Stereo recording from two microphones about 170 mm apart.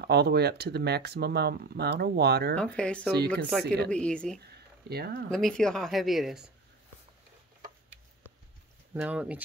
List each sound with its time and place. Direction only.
0.0 s speech: 75° right (ahead or behind)
2.5 s speech: 5° left (ahead or behind)
4.5 s a sound: 70° right (ahead or behind)
5.3 s speech: 5° left (ahead or behind)
8.9 s speech: 5° right (ahead or behind)